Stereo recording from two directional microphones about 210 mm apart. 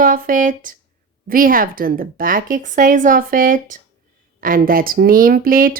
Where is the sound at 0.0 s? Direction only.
40° right (ahead or behind).